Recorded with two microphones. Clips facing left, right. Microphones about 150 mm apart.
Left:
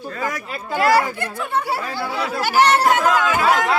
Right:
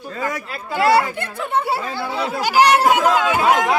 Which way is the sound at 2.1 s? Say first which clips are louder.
Right 1 dB; 25° right (ahead or behind).